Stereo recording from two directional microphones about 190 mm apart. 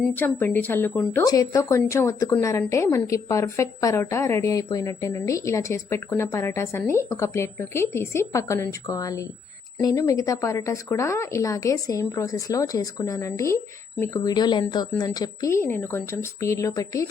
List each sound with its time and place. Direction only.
0.0 s speech: 5° left (ahead or behind)